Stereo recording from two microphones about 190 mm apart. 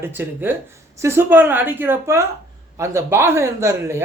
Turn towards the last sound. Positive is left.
turn(degrees=-15)  # may be behind; listen again after turning